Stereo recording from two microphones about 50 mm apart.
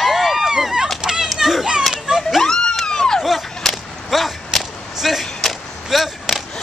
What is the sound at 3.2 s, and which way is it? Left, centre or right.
Whip, centre.